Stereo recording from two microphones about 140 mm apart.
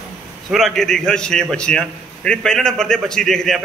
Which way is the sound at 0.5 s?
Centre (ahead or behind).